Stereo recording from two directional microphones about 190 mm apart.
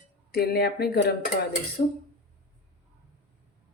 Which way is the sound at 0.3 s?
55° left (ahead or behind).